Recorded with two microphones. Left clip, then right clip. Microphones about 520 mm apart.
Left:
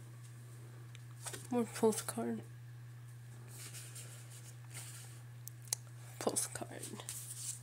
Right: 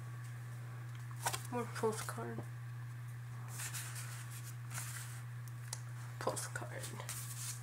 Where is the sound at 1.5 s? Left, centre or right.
Left.